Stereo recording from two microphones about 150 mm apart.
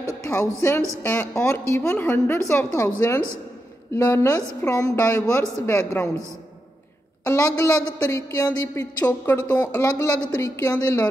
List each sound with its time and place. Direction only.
0.2 s a woman's voice: 15° left (ahead or behind)
7.2 s a woman's voice: 15° left (ahead or behind)